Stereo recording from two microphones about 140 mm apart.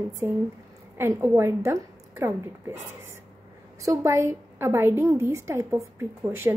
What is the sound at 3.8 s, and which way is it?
A woman's voice, 20° right (ahead or behind).